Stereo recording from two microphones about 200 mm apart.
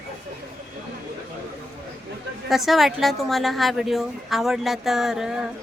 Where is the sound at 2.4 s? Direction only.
Centre (ahead or behind).